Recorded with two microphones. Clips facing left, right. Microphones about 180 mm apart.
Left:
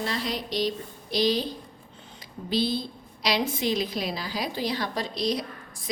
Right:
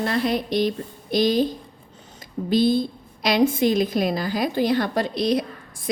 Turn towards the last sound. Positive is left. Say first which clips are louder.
# right 6 dB
turn(degrees=-60)  # may be behind; listen again after turning